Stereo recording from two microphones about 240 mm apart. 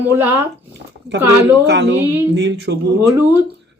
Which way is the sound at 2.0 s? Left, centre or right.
Centre.